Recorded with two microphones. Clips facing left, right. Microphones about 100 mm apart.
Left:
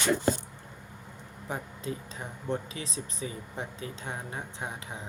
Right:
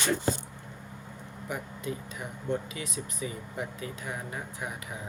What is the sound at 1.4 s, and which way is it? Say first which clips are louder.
Speech: even; 30° left (ahead or behind).